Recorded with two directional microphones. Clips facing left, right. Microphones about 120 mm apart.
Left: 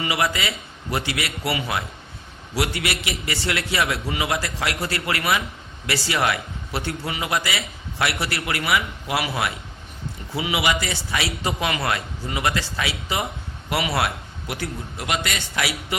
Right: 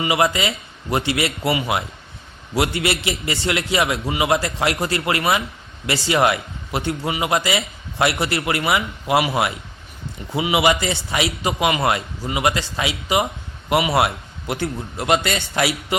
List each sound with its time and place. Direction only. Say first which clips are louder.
0.0 s a man's voice: right 5 dB; 20° right (ahead or behind)